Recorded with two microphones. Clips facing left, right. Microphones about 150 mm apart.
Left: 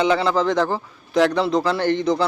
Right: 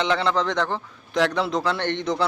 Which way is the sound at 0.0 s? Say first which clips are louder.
Left 4 dB; 5° left (ahead or behind).